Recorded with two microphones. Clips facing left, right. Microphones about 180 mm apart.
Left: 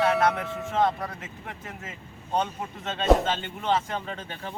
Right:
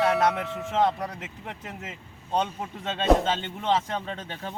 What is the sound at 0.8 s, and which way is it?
Speech, 20° right (ahead or behind).